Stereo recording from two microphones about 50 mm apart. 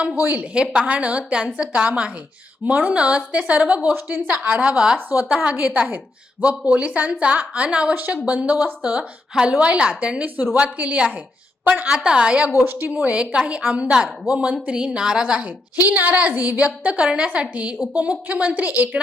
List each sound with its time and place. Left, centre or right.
0.2 s a woman's voice: right
4.6 s a woman's voice: centre
5.5 s a woman's voice: right
9.3 s a woman's voice: centre
10.2 s a woman's voice: right
11.9 s a woman's voice: centre
12.5 s speech: right
13.0 s a woman's voice: right
15.4 s a woman's voice: right